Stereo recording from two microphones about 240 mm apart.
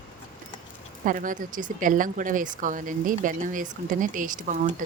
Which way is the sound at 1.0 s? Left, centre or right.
Right.